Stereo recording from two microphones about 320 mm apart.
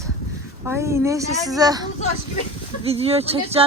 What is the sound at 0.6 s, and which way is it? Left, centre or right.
Speech, centre.